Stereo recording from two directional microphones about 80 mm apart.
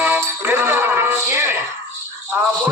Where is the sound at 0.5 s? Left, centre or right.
Right.